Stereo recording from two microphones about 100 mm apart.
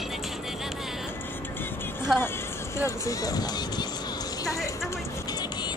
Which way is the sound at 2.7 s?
30° left (ahead or behind).